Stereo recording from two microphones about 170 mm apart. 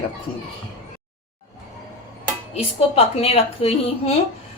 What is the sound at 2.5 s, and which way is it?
A woman's voice, 35° left (ahead or behind).